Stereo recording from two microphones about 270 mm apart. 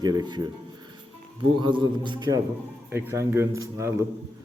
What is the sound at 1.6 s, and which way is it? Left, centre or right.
Speech, centre.